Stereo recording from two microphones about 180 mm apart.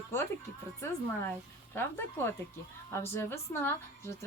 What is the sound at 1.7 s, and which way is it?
Speech, 10° left (ahead or behind).